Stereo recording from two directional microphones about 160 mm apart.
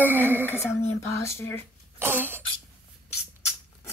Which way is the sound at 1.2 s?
15° left (ahead or behind).